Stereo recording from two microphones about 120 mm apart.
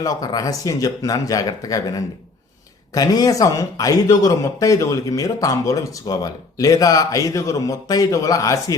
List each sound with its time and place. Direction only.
0.0 s speech: 30° left (ahead or behind)